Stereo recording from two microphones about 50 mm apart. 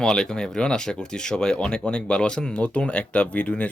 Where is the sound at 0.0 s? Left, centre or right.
Centre.